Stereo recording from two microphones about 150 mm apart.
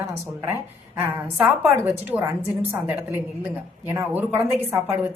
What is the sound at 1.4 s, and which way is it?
Speech, 15° right (ahead or behind).